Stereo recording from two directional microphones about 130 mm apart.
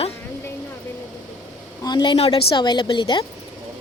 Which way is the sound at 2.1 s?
45° left (ahead or behind).